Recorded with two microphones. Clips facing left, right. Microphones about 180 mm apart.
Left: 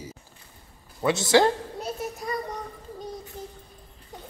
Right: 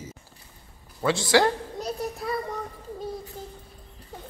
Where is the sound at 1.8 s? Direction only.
Centre (ahead or behind).